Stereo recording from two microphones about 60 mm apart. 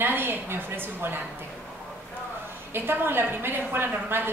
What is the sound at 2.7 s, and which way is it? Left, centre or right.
A woman's voice, right.